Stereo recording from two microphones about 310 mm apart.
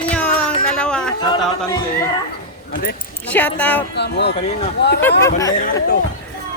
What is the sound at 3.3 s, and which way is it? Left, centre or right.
Speech, centre.